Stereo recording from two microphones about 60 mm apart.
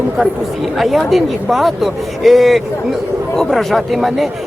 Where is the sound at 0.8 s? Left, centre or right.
Centre.